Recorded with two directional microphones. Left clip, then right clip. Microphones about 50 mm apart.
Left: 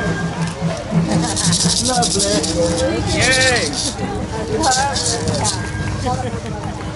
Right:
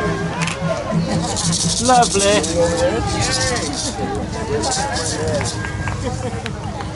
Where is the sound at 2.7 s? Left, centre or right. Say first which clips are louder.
Even; left.